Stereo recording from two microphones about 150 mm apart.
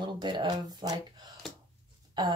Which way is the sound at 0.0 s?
30° right (ahead or behind).